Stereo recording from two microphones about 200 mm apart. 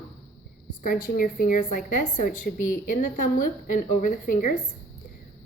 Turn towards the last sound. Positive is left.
turn(degrees=40)  # may be behind; listen again after turning